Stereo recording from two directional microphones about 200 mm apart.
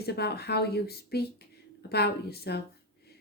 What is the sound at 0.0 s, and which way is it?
Speech, 55° left (ahead or behind).